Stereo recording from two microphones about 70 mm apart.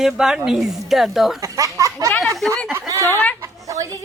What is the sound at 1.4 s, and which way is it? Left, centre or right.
Speech, right.